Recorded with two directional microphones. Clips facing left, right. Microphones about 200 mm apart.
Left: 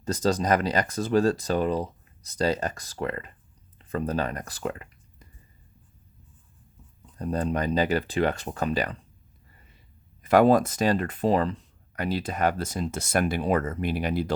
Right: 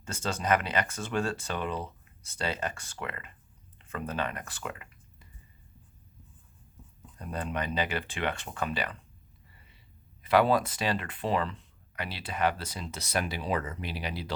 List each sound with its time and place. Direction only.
0.0 s speech: 35° left (ahead or behind)
7.2 s speech: 40° left (ahead or behind)
9.5 s a sound: 45° left (ahead or behind)
10.2 s speech: 45° left (ahead or behind)